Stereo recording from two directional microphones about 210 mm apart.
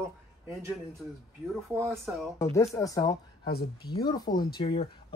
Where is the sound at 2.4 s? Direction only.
15° left (ahead or behind).